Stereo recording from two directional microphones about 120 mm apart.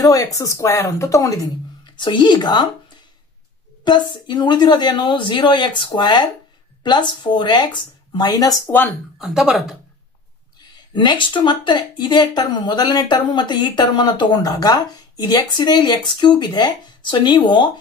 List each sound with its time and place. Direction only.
0.0 s speech: 30° left (ahead or behind)
2.0 s a woman's voice: 40° left (ahead or behind)
9.2 s speech: 5° right (ahead or behind)
10.9 s a woman's voice: 40° left (ahead or behind)